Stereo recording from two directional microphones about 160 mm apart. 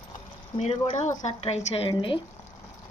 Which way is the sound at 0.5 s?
45° left (ahead or behind).